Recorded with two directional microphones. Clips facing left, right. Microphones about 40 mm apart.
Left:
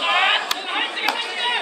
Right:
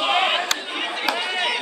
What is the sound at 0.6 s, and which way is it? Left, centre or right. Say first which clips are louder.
Chop: left 4 dB; left.